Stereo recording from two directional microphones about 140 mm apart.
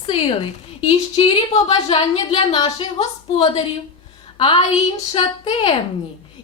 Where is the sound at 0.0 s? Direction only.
40° left (ahead or behind).